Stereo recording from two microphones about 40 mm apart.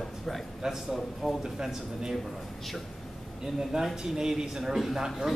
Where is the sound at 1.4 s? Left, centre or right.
Centre.